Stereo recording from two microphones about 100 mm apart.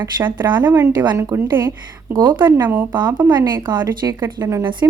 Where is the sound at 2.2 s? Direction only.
45° right (ahead or behind).